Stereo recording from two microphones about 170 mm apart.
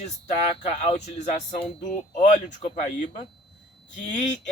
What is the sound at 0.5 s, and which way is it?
Speech, 40° left (ahead or behind).